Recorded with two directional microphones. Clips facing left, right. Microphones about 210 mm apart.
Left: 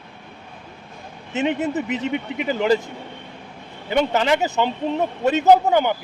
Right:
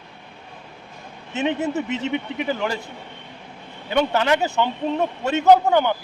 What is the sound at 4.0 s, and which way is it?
Speech, 15° left (ahead or behind).